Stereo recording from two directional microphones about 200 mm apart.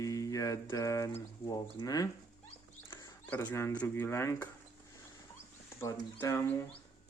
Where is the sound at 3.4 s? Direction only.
15° left (ahead or behind).